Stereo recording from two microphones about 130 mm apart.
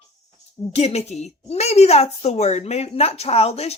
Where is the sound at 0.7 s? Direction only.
50° left (ahead or behind).